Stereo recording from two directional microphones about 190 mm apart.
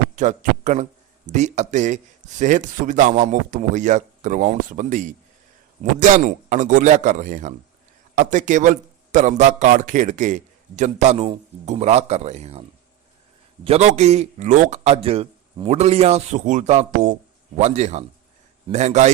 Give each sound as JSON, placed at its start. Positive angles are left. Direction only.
{"t": 0.2, "sound": "speech", "side_deg": -40}
{"t": 13.7, "sound": "speech", "side_deg": -35}